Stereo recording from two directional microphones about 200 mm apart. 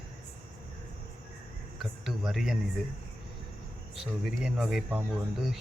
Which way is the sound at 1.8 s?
Centre (ahead or behind).